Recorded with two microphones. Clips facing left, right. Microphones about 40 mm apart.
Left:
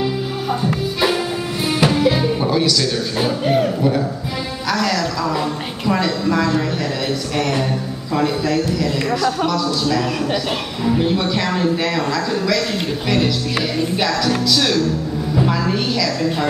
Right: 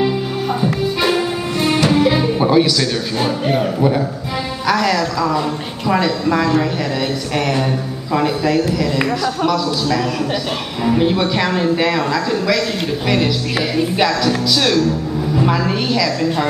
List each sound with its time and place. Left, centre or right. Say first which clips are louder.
0.0 s music: right 3 dB; centre
3.2 s a man's voice: left 1 dB; centre